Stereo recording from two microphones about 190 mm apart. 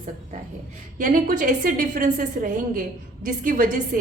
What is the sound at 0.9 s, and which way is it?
A woman's voice, 45° right (ahead or behind).